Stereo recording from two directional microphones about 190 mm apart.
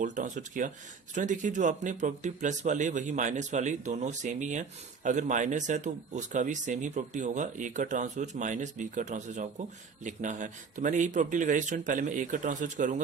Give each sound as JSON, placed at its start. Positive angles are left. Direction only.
{"t": 0.0, "sound": "speech", "side_deg": -40}